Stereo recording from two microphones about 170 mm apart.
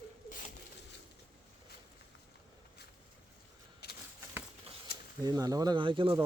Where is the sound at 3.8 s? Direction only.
70° left (ahead or behind).